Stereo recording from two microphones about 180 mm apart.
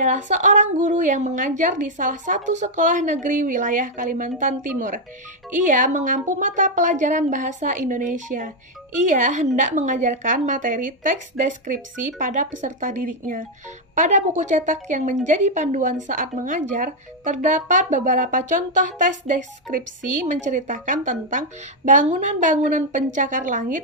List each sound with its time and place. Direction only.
0.0 s a woman's voice: 45° right (ahead or behind)